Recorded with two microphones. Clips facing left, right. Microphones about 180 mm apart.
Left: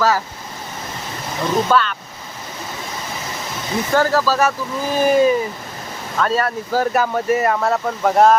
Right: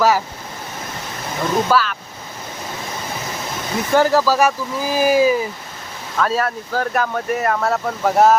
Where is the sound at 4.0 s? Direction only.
15° right (ahead or behind).